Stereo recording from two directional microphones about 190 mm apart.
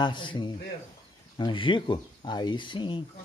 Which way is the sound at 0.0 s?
25° left (ahead or behind).